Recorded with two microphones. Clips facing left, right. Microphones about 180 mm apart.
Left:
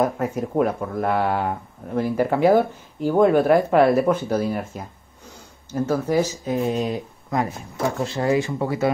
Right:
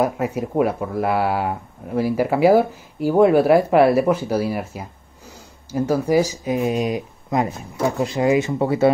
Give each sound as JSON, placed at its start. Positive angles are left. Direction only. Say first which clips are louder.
{"t": 0.0, "sound": "speech", "louder": "right 1 dB", "side_deg": -10}